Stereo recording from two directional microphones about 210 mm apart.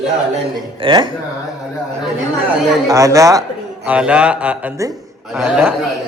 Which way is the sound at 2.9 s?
15° right (ahead or behind).